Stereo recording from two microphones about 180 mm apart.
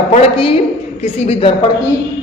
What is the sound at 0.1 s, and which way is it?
A woman's voice, 30° left (ahead or behind).